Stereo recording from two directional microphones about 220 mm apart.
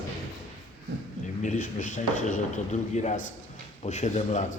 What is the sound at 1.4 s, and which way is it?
A man's voice, 35° left (ahead or behind).